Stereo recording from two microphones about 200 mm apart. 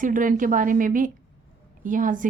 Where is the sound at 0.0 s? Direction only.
40° right (ahead or behind).